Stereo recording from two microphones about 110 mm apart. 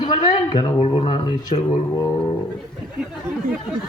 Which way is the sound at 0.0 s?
40° left (ahead or behind).